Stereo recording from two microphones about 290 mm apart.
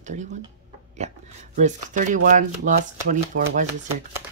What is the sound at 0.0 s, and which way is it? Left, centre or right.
Speech, right.